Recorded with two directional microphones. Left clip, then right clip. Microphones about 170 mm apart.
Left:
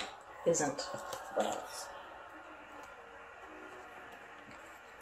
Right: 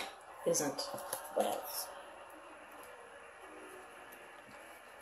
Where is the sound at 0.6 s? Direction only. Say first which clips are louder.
Left 2 dB; 15° left (ahead or behind).